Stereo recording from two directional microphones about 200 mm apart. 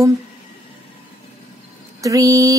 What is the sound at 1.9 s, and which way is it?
Speech, 15° right (ahead or behind).